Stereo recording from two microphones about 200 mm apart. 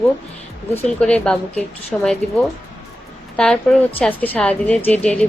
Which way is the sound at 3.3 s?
5° left (ahead or behind).